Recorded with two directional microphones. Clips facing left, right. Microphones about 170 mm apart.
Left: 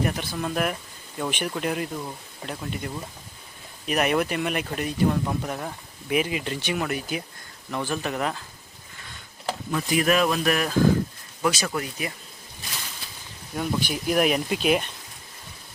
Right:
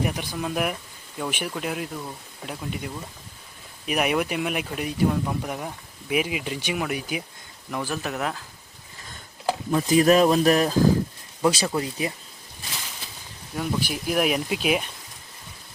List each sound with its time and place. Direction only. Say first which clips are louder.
0.0 s speech: even; 15° right (ahead or behind)
9.7 s speech: right 5 dB; 30° right (ahead or behind)
13.6 s speech: even; centre (ahead or behind)